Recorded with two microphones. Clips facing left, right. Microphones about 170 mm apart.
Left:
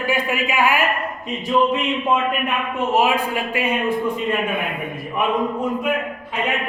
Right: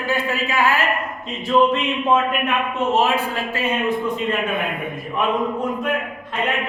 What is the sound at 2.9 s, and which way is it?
A man's voice, 15° left (ahead or behind).